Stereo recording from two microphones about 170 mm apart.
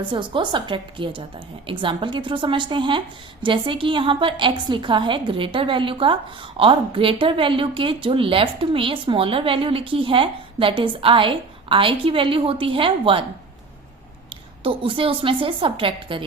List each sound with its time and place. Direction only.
0.1 s a woman's voice: 30° right (ahead or behind)
14.6 s a woman's voice: 30° right (ahead or behind)